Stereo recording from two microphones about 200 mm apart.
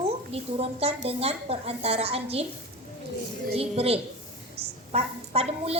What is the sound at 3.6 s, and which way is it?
A woman's voice, 30° right (ahead or behind).